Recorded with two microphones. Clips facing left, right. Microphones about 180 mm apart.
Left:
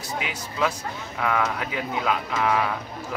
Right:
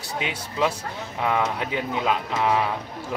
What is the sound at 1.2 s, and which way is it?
Speech, 25° right (ahead or behind).